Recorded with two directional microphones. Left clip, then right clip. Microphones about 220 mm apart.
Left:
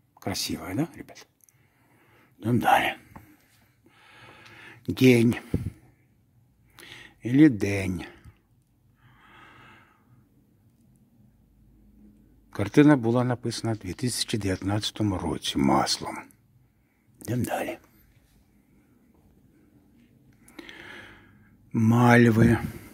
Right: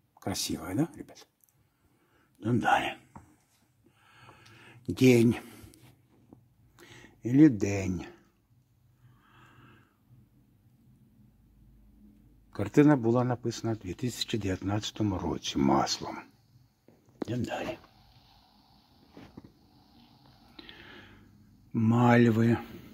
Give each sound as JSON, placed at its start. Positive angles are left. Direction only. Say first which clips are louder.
{"t": 0.2, "sound": "speech", "louder": "left 3 dB", "side_deg": 5}
{"t": 2.1, "sound": "a man's voice", "louder": "left 3 dB", "side_deg": 15}
{"t": 3.9, "sound": "a sound", "louder": "left 6 dB", "side_deg": 15}
{"t": 6.8, "sound": "a sound", "louder": "left 3 dB", "side_deg": 0}
{"t": 7.4, "sound": "speech", "louder": "left 3 dB", "side_deg": 15}
{"t": 9.2, "sound": "gasp", "louder": "left 8 dB", "side_deg": 20}
{"t": 12.4, "sound": "speech", "louder": "left 4 dB", "side_deg": 20}
{"t": 17.3, "sound": "speech", "louder": "left 6 dB", "side_deg": 35}
{"t": 20.5, "sound": "a sound", "louder": "left 6 dB", "side_deg": 25}
{"t": 21.7, "sound": "speech", "louder": "left 4 dB", "side_deg": 20}